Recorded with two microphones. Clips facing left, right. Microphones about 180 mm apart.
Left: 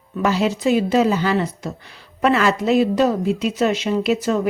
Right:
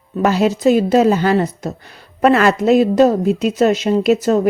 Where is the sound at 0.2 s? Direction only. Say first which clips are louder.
Right 4 dB; 45° right (ahead or behind).